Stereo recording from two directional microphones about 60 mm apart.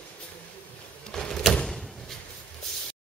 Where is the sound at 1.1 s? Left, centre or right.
Centre.